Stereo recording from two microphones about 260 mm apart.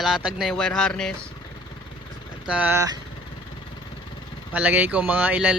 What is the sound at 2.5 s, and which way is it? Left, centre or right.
Speech, centre.